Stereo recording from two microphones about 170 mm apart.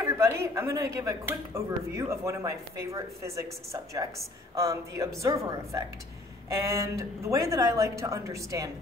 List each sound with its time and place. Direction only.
0.0 s speech: 15° right (ahead or behind)
4.6 s speech: 20° right (ahead or behind)